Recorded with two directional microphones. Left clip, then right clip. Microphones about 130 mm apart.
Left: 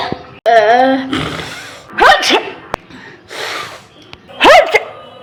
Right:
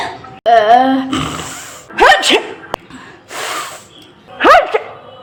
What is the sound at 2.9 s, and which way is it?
Gasp, 35° right (ahead or behind).